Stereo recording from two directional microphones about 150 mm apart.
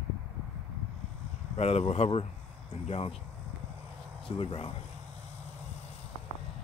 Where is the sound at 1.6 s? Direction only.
45° left (ahead or behind).